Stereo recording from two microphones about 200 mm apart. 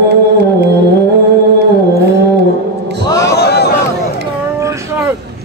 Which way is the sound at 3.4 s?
55° left (ahead or behind).